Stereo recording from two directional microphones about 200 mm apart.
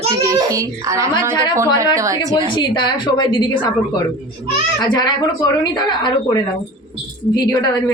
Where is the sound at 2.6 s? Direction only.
20° left (ahead or behind).